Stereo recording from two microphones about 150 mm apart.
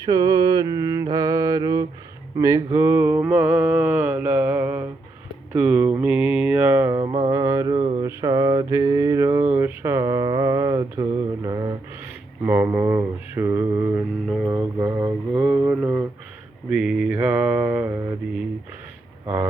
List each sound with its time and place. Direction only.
0.0 s mantra: 25° right (ahead or behind)
2.3 s speech: 20° right (ahead or behind)
2.8 s mantra: 15° right (ahead or behind)
7.0 s mantra: 30° right (ahead or behind)
7.8 s mantra: 45° right (ahead or behind)
8.0 s mantra: 25° right (ahead or behind)
12.5 s mantra: 10° right (ahead or behind)